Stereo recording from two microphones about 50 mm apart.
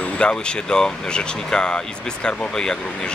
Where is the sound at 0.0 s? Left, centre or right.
Centre.